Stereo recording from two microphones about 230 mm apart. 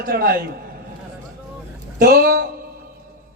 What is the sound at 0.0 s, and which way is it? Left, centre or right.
Speech, right.